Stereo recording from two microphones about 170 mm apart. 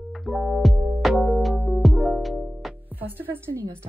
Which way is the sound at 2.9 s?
10° right (ahead or behind).